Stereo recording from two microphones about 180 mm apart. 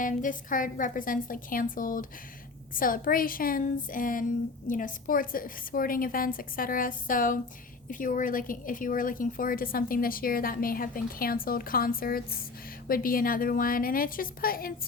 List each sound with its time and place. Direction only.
0.0 s a woman's voice: 45° left (ahead or behind)